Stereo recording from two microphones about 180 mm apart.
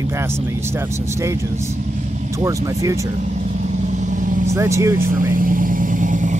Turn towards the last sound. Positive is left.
turn(degrees=-45)  # may be behind; listen again after turning